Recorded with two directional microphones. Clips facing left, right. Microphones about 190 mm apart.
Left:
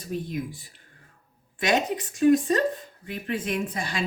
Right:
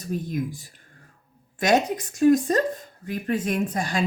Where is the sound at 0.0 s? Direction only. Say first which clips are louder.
Right 3 dB; 45° right (ahead or behind).